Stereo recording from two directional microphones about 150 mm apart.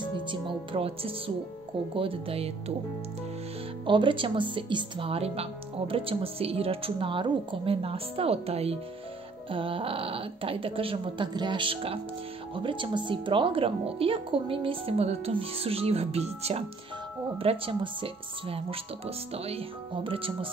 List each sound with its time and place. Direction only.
0.3 s speech: 35° right (ahead or behind)
3.8 s speech: 35° right (ahead or behind)